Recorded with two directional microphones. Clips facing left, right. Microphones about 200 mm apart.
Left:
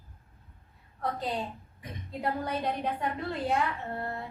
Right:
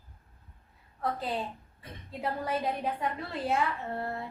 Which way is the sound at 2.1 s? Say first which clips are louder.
Even; centre (ahead or behind).